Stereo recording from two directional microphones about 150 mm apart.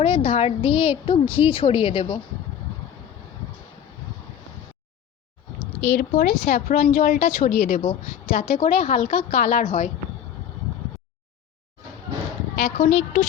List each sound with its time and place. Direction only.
0.0 s a woman's voice: 40° left (ahead or behind)
5.9 s a woman's voice: 60° left (ahead or behind)
12.5 s speech: 50° left (ahead or behind)